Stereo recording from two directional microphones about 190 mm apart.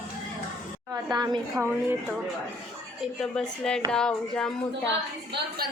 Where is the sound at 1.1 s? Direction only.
20° right (ahead or behind).